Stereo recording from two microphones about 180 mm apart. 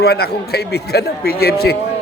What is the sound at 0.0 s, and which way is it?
A man's voice, 60° left (ahead or behind).